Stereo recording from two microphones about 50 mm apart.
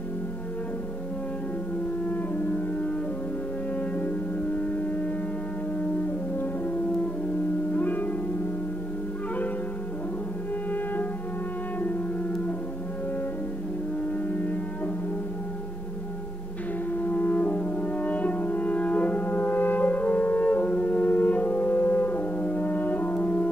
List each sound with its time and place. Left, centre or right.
2.0 s music: left
7.7 s music: left
16.9 s french horn: left